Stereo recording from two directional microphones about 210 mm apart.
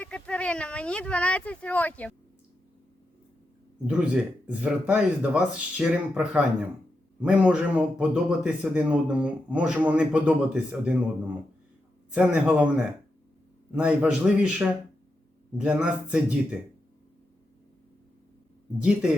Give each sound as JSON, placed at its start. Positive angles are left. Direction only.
{"t": 0.0, "sound": "speech", "side_deg": 5}
{"t": 3.8, "sound": "speech", "side_deg": -5}
{"t": 12.1, "sound": "speech", "side_deg": -5}
{"t": 18.8, "sound": "speech", "side_deg": -5}